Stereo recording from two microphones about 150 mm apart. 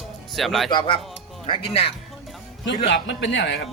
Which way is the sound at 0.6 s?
35° left (ahead or behind).